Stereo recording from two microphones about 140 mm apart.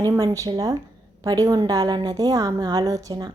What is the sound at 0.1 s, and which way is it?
A woman's voice, 25° right (ahead or behind).